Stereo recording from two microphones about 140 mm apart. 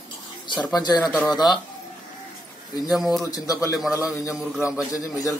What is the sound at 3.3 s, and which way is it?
Speech, 25° left (ahead or behind).